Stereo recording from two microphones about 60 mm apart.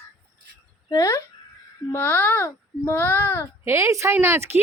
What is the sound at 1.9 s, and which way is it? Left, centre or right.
A child's voice, left.